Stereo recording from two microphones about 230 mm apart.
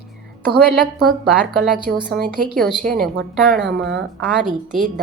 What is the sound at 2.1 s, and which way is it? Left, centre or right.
Speech, right.